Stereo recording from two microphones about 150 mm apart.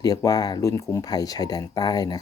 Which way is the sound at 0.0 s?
25° left (ahead or behind).